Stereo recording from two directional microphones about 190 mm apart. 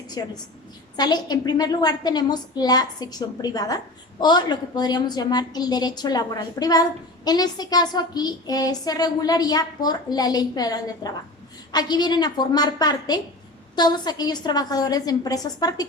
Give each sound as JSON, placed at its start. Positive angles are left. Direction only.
{"t": 0.2, "sound": "speech", "side_deg": 20}